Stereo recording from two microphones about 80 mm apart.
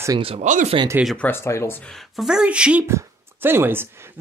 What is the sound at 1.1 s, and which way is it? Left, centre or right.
Speech, left.